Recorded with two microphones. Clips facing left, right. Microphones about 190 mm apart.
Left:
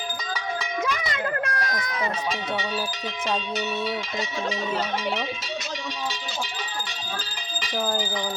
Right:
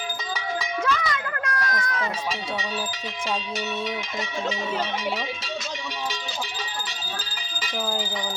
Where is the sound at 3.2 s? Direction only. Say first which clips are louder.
Left 2 dB; 10° right (ahead or behind).